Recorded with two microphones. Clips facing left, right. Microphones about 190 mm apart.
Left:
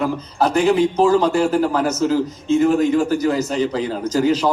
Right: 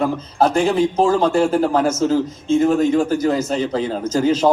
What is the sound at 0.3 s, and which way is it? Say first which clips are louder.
A man's voice: even; 50° right (ahead or behind).